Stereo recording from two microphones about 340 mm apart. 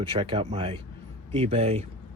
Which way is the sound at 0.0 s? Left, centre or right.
Centre.